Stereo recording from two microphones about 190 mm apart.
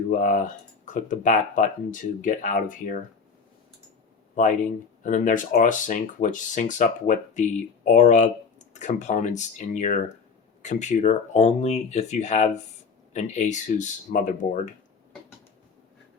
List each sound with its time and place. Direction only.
0.1 s speech: 45° left (ahead or behind)
5.0 s speech: 40° left (ahead or behind)